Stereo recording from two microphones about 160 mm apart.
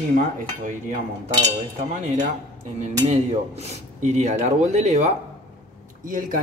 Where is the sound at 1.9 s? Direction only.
50° right (ahead or behind).